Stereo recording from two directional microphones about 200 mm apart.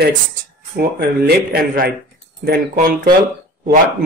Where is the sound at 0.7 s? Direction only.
55° right (ahead or behind).